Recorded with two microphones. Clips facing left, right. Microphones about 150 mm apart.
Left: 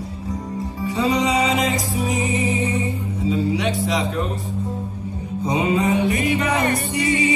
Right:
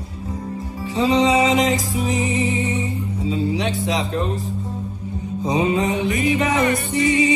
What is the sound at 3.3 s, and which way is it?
Music, 25° right (ahead or behind).